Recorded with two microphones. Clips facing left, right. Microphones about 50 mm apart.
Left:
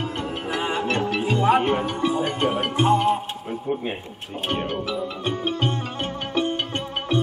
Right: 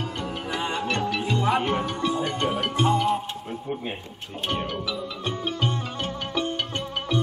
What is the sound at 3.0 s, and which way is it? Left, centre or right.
Speech, centre.